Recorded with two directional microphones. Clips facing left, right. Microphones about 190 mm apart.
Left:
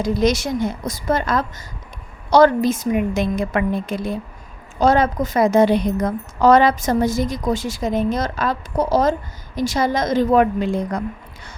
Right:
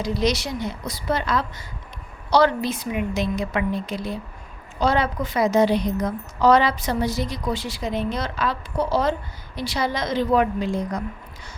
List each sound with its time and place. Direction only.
0.0 s a woman's voice: 50° left (ahead or behind)